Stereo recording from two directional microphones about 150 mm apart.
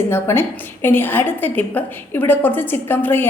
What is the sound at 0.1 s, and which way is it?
A woman's voice, 15° left (ahead or behind).